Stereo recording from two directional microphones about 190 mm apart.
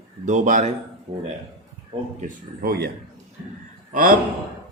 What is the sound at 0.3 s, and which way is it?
Speech, 40° right (ahead or behind).